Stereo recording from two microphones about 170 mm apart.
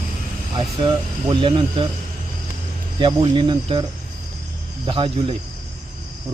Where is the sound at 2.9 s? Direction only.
30° right (ahead or behind).